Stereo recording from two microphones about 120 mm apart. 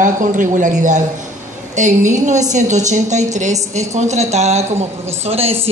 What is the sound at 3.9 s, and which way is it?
A woman's voice, 70° right (ahead or behind).